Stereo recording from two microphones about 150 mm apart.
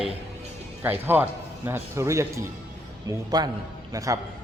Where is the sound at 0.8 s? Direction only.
15° right (ahead or behind).